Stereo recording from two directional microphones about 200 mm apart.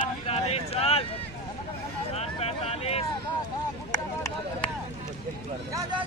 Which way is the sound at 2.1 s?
30° left (ahead or behind).